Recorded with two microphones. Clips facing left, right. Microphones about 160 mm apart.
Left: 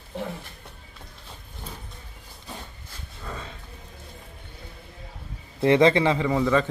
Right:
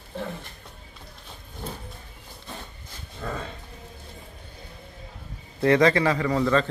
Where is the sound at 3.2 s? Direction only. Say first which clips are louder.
Right 5 dB; 60° right (ahead or behind).